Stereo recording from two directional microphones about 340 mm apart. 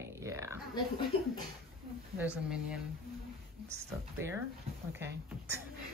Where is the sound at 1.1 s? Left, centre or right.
Left.